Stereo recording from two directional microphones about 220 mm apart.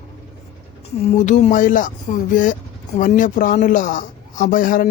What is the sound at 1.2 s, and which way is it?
Speech, 35° left (ahead or behind).